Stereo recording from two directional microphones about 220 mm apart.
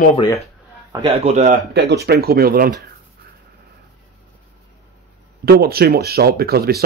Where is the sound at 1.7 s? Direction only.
50° right (ahead or behind).